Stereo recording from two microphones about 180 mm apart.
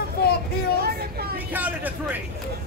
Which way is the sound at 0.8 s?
60° right (ahead or behind).